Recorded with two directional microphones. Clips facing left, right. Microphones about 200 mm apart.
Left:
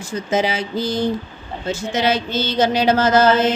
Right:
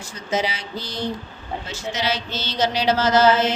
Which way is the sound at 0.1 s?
50° left (ahead or behind).